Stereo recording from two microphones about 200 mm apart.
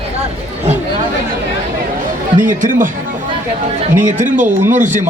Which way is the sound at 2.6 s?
40° right (ahead or behind).